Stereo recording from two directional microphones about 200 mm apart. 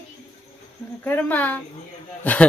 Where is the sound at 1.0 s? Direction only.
10° left (ahead or behind).